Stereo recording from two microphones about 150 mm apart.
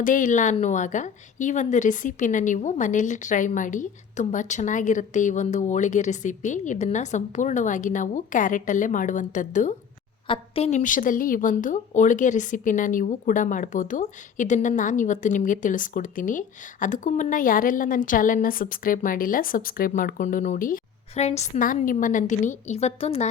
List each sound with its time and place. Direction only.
0.0 s a woman's voice: 60° left (ahead or behind)
10.2 s a woman's voice: 35° left (ahead or behind)
10.7 s a woman's voice: 60° left (ahead or behind)
21.2 s a woman's voice: 45° left (ahead or behind)
21.6 s a woman's voice: 65° left (ahead or behind); by 23.3 s 45° left (ahead or behind)